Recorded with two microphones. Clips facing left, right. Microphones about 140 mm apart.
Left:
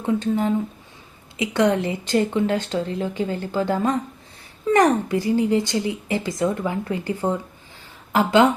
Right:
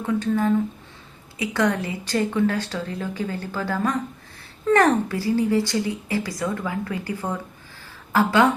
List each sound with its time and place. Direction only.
0.0 s speech: 25° left (ahead or behind)